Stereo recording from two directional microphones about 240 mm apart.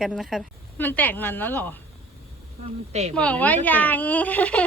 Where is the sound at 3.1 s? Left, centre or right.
Centre.